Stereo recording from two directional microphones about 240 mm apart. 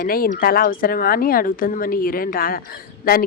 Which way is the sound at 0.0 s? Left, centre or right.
Left.